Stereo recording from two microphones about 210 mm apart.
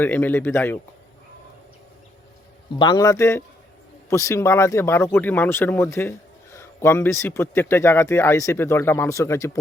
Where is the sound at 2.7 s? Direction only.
20° left (ahead or behind).